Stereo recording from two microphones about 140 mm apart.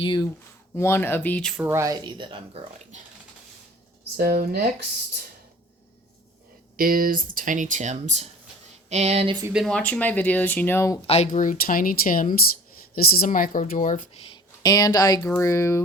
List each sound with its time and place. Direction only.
0.0 s speech: 35° left (ahead or behind)
0.8 s speech: 15° left (ahead or behind)
1.6 s speech: 20° right (ahead or behind); by 2.6 s 35° right (ahead or behind)
4.2 s speech: 90° right
6.7 s speech: 90° right; by 9.3 s 45° right (ahead or behind)
9.6 s speech: 5° left (ahead or behind)
11.0 s speech: 45° left (ahead or behind)
11.3 s speech: 70° left (ahead or behind)
12.9 s speech: 90° left; by 14.1 s 65° left (ahead or behind)
14.3 s speech: 25° left (ahead or behind)